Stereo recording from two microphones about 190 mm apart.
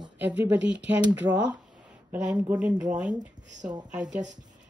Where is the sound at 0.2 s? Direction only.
10° right (ahead or behind).